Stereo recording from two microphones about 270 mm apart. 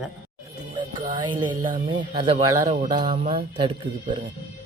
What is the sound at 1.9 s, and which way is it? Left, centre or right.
Speech, centre.